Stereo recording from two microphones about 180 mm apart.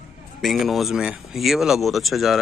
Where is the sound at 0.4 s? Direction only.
Centre (ahead or behind).